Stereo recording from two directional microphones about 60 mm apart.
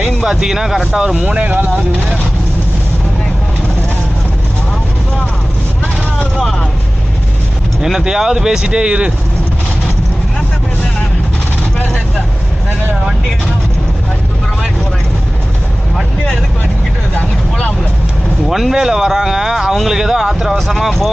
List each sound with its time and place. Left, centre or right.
0.0 s a man's voice: centre; by 1.8 s right
7.8 s speech: centre
18.4 s speech: centre